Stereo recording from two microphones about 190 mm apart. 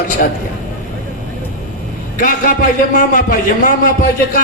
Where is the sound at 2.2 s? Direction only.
45° left (ahead or behind).